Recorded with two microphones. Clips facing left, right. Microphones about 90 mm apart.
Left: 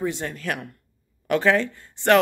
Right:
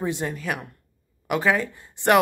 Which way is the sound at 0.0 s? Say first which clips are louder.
Even; 15° right (ahead or behind).